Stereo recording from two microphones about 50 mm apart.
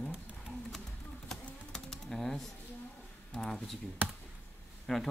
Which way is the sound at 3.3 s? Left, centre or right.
Centre.